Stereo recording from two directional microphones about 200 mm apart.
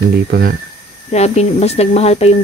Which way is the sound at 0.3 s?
50° right (ahead or behind).